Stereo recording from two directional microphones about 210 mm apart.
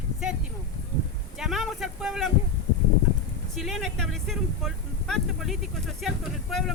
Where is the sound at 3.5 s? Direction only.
Centre (ahead or behind).